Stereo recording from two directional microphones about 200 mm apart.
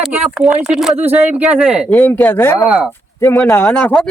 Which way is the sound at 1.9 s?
10° left (ahead or behind).